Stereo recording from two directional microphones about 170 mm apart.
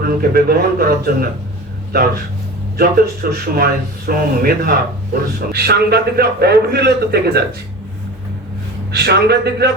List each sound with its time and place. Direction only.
0.0 s a man's voice: 65° right (ahead or behind)
8.9 s a man's voice: 70° right (ahead or behind)